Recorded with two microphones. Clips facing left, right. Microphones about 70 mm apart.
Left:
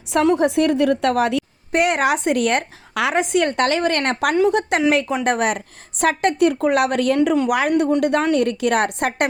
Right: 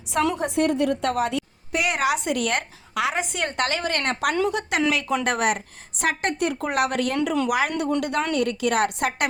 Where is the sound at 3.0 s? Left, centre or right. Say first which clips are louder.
Left 7 dB; left.